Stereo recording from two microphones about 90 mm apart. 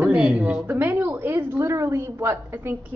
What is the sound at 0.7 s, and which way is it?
A woman's voice, 20° right (ahead or behind).